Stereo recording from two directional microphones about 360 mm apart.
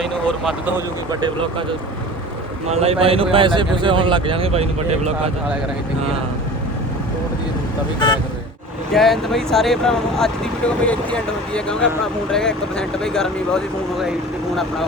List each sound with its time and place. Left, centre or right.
0.1 s speech: centre
1.1 s speech: centre
2.6 s speech: centre
7.9 s speech: centre
8.9 s speech: centre